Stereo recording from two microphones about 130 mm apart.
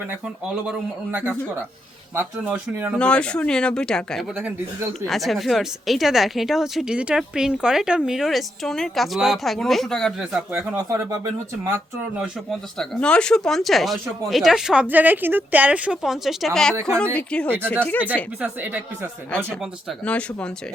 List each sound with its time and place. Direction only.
0.6 s speech: 10° right (ahead or behind)
3.0 s speech: 10° left (ahead or behind)
4.4 s speech: 10° right (ahead or behind)
5.0 s speech: centre (ahead or behind)
10.8 s speech: 25° right (ahead or behind)
12.5 s speech: centre (ahead or behind)
18.3 s speech: 10° right (ahead or behind)
20.1 s speech: 10° left (ahead or behind)